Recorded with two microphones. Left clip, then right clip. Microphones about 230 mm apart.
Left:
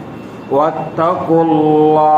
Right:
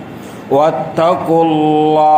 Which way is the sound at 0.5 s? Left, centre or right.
Right.